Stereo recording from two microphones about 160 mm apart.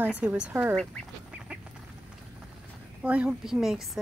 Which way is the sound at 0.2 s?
10° right (ahead or behind).